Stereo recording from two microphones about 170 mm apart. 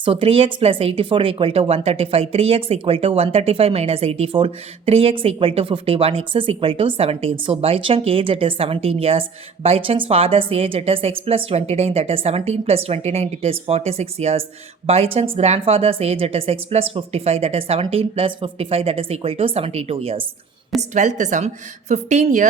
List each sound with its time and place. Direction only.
0.0 s a woman's voice: 35° right (ahead or behind)